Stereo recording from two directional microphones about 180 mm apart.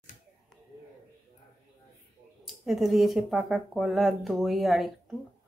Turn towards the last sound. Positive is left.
turn(degrees=0)  # may be behind; listen again after turning